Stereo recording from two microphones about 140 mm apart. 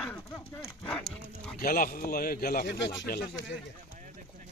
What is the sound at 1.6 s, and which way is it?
Speech, 90° left.